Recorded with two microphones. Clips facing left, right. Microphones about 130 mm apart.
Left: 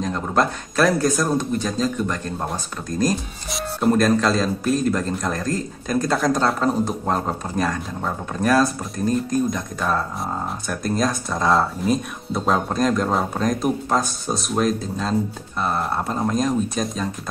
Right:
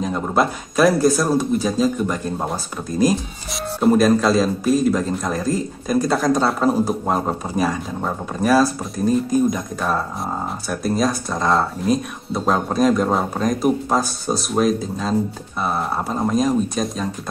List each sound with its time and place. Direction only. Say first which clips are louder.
0.0 s speech: right 2 dB; 5° right (ahead or behind)